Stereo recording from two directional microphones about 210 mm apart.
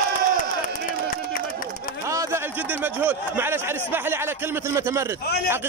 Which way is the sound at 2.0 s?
15° right (ahead or behind).